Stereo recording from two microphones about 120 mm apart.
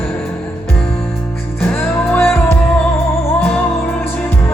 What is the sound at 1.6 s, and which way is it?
Music, 15° left (ahead or behind).